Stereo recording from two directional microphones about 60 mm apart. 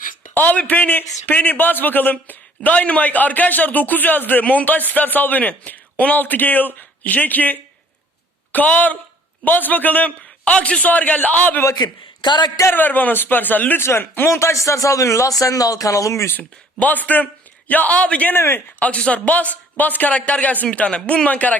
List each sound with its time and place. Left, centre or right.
0.3 s a man's voice: left
11.6 s a man's voice: left
12.6 s speech: left
14.3 s a man's voice: left
16.8 s a man's voice: left
18.3 s speech: left
18.8 s a man's voice: centre